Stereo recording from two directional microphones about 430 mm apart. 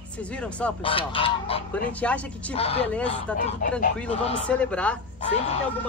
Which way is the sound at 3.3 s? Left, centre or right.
Centre.